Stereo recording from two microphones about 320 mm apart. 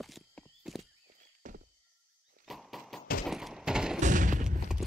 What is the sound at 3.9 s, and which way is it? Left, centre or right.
Thump, right.